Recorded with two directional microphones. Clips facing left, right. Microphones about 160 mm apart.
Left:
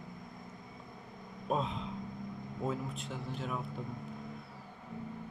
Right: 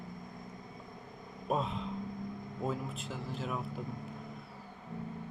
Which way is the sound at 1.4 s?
Centre (ahead or behind).